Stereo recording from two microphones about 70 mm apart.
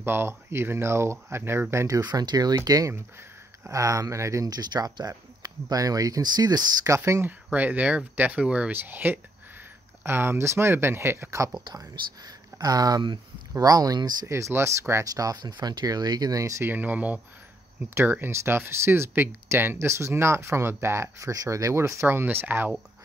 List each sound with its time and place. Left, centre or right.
0.0 s speech: right
1.9 s speech: right
4.5 s speech: right
7.5 s speech: right
11.6 s speech: right
14.2 s speech: right
15.1 s speech: right
16.6 s speech: right
22.0 s speech: right